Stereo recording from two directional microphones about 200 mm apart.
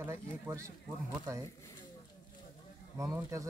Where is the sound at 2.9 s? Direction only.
15° right (ahead or behind).